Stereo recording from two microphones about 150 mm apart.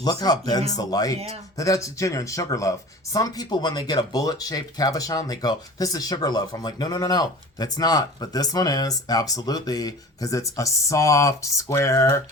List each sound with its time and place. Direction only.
0.0 s speech: 25° left (ahead or behind)